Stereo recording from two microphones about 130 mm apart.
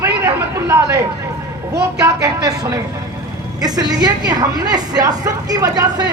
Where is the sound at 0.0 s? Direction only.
20° right (ahead or behind).